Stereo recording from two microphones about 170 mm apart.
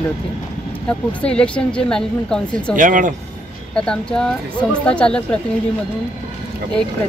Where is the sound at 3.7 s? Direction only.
5° left (ahead or behind).